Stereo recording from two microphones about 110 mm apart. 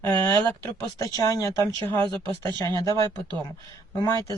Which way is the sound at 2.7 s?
35° left (ahead or behind).